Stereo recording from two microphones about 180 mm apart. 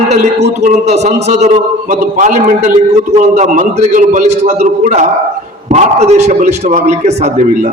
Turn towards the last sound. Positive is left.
turn(degrees=-40)  # may be behind; listen again after turning